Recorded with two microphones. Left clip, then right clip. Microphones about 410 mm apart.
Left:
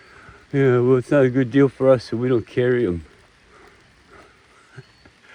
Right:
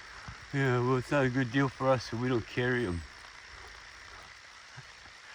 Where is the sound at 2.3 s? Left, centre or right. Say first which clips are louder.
Left 12 dB; left.